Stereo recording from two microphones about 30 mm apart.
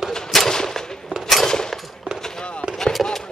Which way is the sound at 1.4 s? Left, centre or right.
Left.